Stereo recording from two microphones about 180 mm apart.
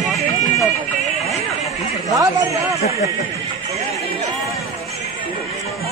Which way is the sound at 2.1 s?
20° right (ahead or behind).